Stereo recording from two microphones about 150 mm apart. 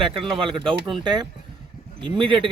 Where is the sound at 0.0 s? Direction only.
35° right (ahead or behind).